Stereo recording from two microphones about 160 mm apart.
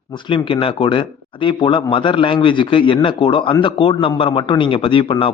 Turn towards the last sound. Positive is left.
turn(degrees=35)  # may be behind; listen again after turning